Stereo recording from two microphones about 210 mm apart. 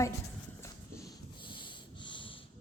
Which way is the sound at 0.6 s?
15° left (ahead or behind).